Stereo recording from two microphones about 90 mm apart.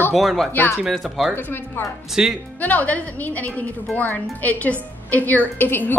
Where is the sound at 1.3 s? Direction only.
25° left (ahead or behind).